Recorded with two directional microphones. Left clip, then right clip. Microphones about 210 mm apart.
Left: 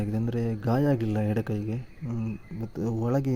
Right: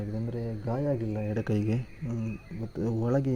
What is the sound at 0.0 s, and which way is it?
Mantra, 25° left (ahead or behind).